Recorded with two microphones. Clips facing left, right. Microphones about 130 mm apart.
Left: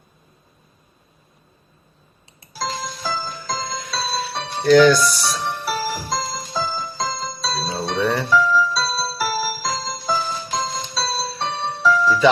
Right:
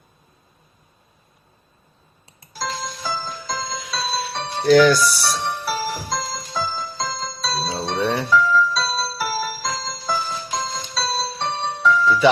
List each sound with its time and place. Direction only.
2.5 s music: 5° left (ahead or behind)
7.9 s music: 15° right (ahead or behind)
8.5 s music: centre (ahead or behind)